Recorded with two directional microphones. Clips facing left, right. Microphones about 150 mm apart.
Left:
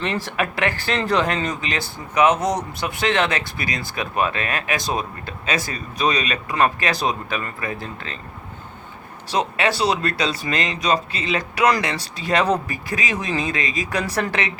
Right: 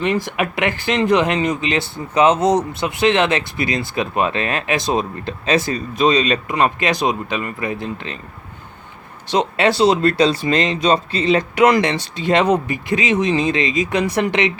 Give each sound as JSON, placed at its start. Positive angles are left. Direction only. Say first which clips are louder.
{"t": 0.0, "sound": "speech", "louder": "right 4 dB", "side_deg": -15}
{"t": 9.3, "sound": "speech", "louder": "right 5 dB", "side_deg": -25}